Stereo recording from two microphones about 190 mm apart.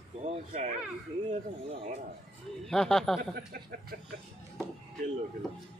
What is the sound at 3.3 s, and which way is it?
Speech, 50° right (ahead or behind).